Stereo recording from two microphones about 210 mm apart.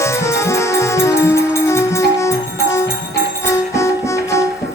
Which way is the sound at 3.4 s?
15° left (ahead or behind).